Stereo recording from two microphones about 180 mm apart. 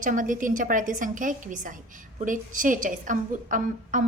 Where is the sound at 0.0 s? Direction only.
45° right (ahead or behind).